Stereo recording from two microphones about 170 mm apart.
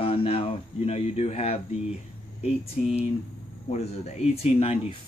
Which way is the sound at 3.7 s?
40° left (ahead or behind).